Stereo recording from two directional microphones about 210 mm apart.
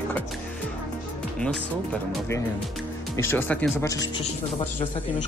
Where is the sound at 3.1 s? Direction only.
10° left (ahead or behind).